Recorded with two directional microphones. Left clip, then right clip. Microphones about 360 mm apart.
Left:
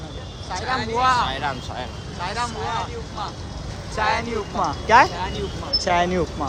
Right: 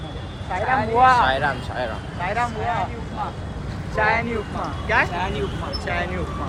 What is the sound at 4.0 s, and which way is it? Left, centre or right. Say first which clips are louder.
Speech: right 2 dB; centre.